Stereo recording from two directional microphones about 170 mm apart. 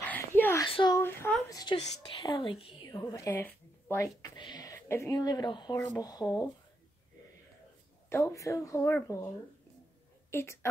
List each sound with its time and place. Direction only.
0.0 s a sound: 10° left (ahead or behind)
0.7 s speech: 30° left (ahead or behind)
0.9 s speech: 15° left (ahead or behind)
1.6 s speech: 25° left (ahead or behind)
8.1 s speech: 15° left (ahead or behind)
10.3 s speech: 15° left (ahead or behind)